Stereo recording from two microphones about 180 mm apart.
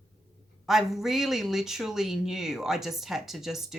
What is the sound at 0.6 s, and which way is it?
Speech, centre (ahead or behind).